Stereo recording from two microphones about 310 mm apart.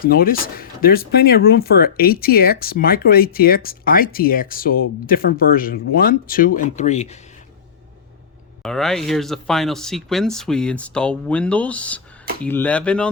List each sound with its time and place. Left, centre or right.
0.0 s speech: left
8.6 s speech: centre